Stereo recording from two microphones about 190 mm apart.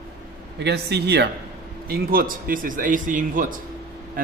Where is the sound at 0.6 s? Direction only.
60° right (ahead or behind).